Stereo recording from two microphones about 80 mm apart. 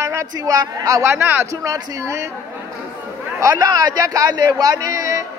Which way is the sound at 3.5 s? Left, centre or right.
Right.